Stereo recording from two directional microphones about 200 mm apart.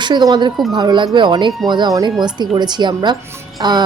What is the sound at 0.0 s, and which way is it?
Speech, 20° right (ahead or behind).